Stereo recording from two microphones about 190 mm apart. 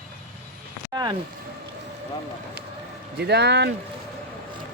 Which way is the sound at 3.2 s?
60° right (ahead or behind).